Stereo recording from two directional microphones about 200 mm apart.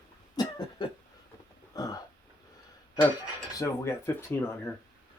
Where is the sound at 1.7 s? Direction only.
20° left (ahead or behind).